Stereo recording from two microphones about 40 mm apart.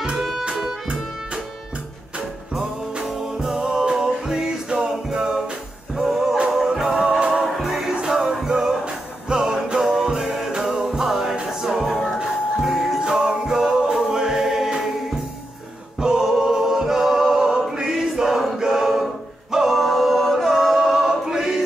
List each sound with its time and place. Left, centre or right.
3.2 s music: centre
8.8 s music: centre
11.9 s music: centre
12.2 s music: centre
16.0 s choir: centre
18.7 s a sound: centre
19.5 s music: centre
19.8 s a sound: centre
20.7 s a capella: centre